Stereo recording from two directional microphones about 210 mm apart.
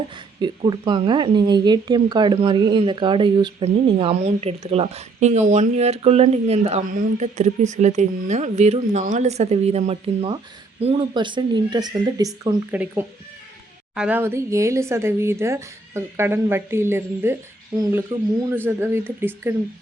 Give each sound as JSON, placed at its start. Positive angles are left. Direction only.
{"t": 0.4, "sound": "a woman's voice", "side_deg": -20}